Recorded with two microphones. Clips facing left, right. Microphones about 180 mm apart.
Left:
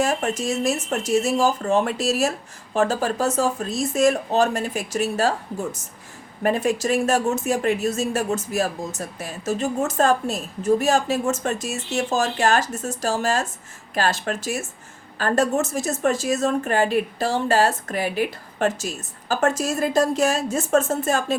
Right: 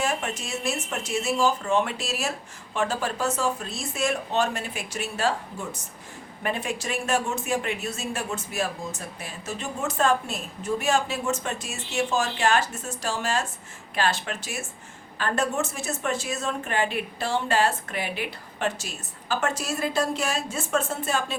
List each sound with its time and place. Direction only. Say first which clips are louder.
0.0 s a woman's voice: left 6 dB; 40° left (ahead or behind)